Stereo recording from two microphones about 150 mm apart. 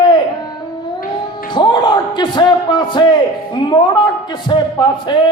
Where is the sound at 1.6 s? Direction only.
30° left (ahead or behind).